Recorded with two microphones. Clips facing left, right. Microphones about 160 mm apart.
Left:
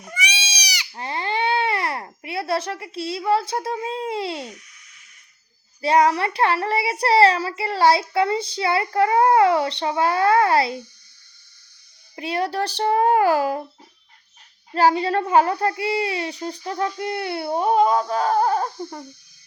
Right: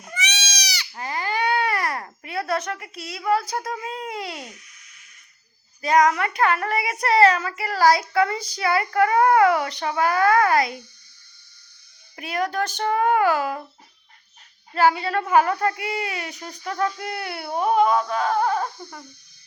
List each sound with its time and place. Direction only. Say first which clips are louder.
0.1 s goat: left 1 dB; 10° left (ahead or behind)
0.9 s babbling: left 1 dB; 25° left (ahead or behind)
5.8 s a woman's voice: left 1 dB; 30° left (ahead or behind)
12.1 s speech: left 1 dB; 30° left (ahead or behind)
14.8 s a woman's voice: left 2 dB; 35° left (ahead or behind)